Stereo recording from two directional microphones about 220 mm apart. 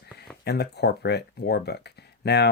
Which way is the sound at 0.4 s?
50° left (ahead or behind).